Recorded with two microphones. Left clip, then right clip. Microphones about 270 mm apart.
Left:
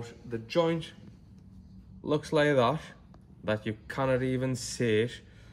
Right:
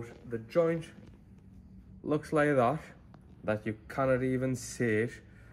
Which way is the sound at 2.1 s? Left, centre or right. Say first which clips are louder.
Left 2 dB; left.